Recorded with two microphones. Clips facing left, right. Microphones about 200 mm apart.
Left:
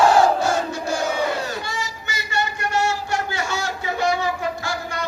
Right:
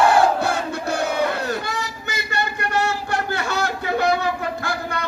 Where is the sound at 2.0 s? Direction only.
60° right (ahead or behind).